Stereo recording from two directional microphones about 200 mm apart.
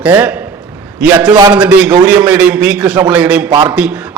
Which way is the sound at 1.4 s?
20° right (ahead or behind).